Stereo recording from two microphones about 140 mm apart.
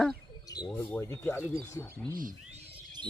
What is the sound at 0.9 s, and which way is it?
Speech, 15° left (ahead or behind).